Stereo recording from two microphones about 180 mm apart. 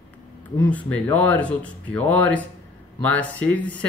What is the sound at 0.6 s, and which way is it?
Speech, 10° left (ahead or behind).